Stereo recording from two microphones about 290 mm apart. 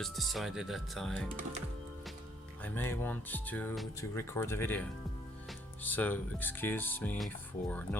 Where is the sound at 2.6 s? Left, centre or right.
Centre.